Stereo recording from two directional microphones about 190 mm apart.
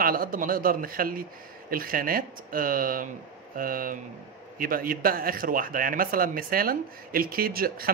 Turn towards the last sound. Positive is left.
turn(degrees=-50)  # may be behind; listen again after turning